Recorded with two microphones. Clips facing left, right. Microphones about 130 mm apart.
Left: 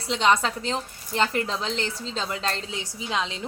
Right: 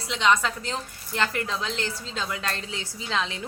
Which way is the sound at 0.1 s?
35° left (ahead or behind).